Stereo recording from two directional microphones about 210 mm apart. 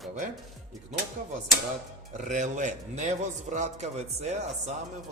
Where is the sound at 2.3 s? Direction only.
35° right (ahead or behind).